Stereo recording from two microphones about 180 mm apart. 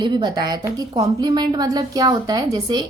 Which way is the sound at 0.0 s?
25° right (ahead or behind).